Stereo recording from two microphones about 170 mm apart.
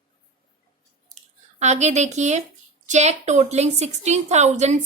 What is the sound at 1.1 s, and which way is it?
Squish, 40° right (ahead or behind).